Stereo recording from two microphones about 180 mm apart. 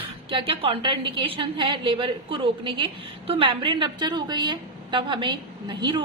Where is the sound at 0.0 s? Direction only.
30° right (ahead or behind).